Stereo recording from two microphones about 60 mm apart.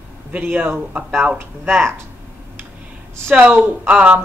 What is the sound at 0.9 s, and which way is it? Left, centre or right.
Speech, right.